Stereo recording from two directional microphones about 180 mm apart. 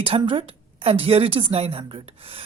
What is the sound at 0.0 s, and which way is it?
A woman's voice, 30° right (ahead or behind).